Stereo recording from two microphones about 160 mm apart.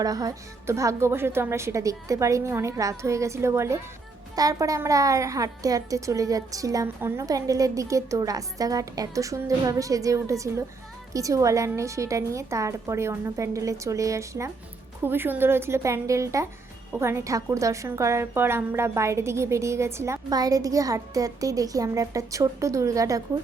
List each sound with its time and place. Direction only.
0.0 s a woman's voice: 25° right (ahead or behind)